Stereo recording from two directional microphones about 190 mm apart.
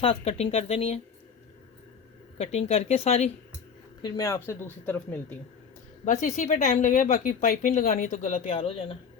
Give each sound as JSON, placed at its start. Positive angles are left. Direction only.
{"t": 0.0, "sound": "speech", "side_deg": 30}
{"t": 2.4, "sound": "speech", "side_deg": 35}
{"t": 4.0, "sound": "speech", "side_deg": 15}
{"t": 6.1, "sound": "speech", "side_deg": 40}